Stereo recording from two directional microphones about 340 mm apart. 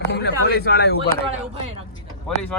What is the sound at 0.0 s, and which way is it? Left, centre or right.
Speech, left.